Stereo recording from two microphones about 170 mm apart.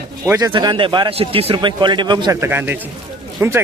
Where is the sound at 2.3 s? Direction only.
15° right (ahead or behind).